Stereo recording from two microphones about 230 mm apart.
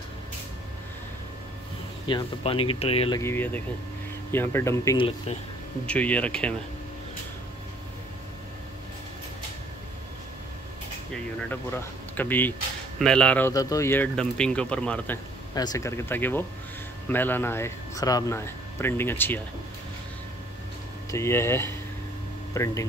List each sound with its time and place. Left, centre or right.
2.0 s speech: left
3.2 s speech: centre
11.3 s speech: centre
15.5 s speech: centre
21.1 s speech: centre